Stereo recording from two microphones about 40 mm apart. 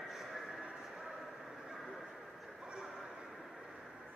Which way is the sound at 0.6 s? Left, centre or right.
Centre.